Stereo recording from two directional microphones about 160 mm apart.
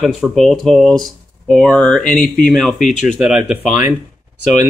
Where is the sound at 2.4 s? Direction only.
Centre (ahead or behind).